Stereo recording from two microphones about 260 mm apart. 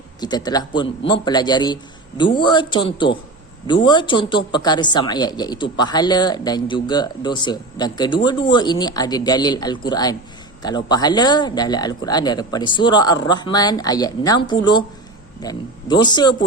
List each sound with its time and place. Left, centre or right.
0.2 s speech: centre